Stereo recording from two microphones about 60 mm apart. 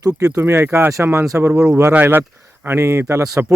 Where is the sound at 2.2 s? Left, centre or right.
Right.